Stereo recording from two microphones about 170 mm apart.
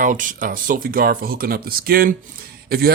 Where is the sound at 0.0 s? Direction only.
50° right (ahead or behind).